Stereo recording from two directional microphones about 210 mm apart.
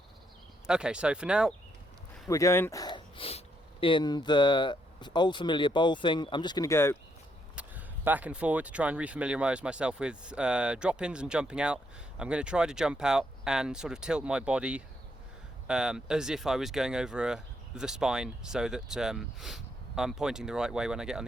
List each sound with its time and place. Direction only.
0.7 s speech: 5° right (ahead or behind)
2.2 s speech: 15° left (ahead or behind)
7.5 s speech: 10° right (ahead or behind)